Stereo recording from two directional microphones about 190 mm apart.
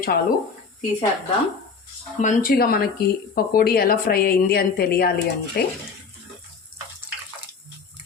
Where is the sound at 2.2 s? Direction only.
50° left (ahead or behind).